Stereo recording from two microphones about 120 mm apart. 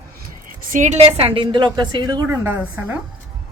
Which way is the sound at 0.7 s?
85° right.